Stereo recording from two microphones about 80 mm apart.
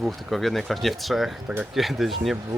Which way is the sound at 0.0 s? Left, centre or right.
Centre.